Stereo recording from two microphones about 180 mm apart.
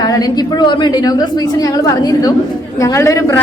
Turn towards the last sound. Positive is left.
turn(degrees=15)  # may be behind; listen again after turning